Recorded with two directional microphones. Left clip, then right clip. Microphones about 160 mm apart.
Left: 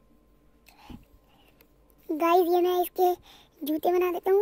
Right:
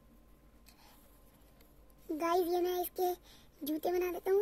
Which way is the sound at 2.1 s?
20° left (ahead or behind).